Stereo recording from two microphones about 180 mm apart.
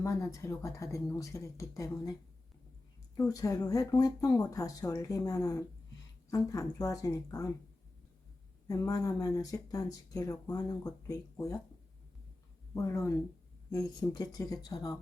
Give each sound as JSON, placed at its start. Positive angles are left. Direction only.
{"t": 0.0, "sound": "speech", "side_deg": 15}
{"t": 3.2, "sound": "speech", "side_deg": 20}
{"t": 8.6, "sound": "speech", "side_deg": 20}
{"t": 12.7, "sound": "speech", "side_deg": 15}